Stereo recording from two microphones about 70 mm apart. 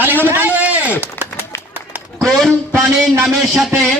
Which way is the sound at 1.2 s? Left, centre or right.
Left.